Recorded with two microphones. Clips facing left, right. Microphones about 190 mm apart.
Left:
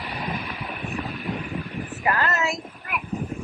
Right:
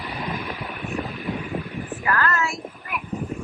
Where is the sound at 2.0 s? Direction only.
25° left (ahead or behind).